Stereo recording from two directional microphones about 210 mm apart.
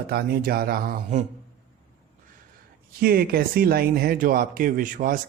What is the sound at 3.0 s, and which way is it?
A man's voice, 45° right (ahead or behind).